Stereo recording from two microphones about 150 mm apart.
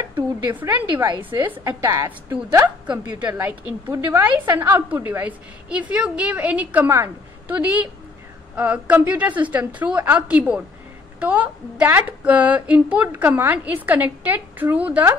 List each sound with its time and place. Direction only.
0.6 s a woman's voice: 10° right (ahead or behind)